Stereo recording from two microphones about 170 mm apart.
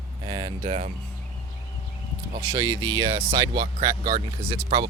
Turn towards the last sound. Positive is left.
turn(degrees=-35)  # may be behind; listen again after turning